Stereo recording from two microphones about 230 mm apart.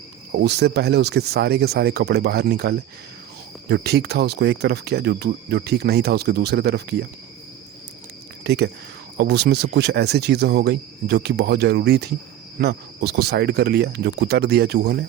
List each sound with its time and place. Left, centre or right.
0.3 s speech: right
8.4 s speech: right